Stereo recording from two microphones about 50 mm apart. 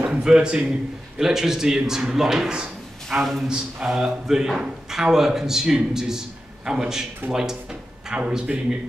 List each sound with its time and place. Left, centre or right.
0.1 s a man's voice: centre
3.1 s a man's voice: centre